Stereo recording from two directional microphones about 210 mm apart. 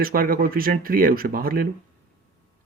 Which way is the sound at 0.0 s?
45° right (ahead or behind).